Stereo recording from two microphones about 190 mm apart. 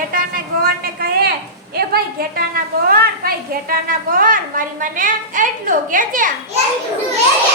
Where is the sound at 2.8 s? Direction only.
50° right (ahead or behind).